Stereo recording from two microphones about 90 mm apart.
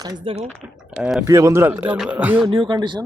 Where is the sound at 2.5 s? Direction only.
60° right (ahead or behind).